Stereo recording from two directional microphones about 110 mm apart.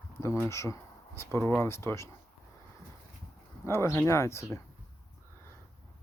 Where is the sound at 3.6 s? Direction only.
25° left (ahead or behind).